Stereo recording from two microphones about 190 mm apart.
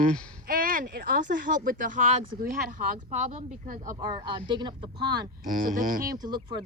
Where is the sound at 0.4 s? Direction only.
50° right (ahead or behind).